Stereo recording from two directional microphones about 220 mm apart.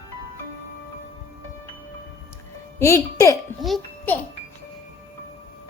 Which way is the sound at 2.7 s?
15° left (ahead or behind).